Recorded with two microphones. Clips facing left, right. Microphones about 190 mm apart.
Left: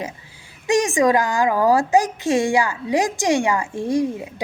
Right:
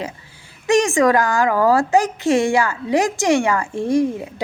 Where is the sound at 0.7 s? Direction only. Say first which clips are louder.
Right 2 dB; 15° left (ahead or behind).